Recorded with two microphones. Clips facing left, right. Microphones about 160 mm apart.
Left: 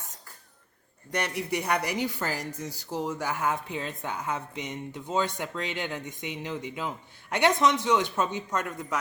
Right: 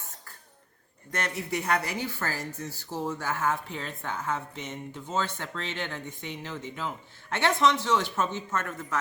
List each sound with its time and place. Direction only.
1.1 s speech: 15° left (ahead or behind)